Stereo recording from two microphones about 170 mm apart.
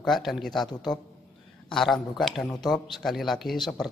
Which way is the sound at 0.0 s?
Centre (ahead or behind).